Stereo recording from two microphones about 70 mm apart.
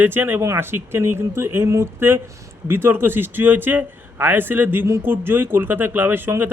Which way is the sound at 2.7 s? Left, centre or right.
Right.